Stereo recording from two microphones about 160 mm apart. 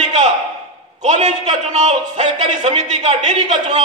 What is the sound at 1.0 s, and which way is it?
A man's voice, 45° right (ahead or behind).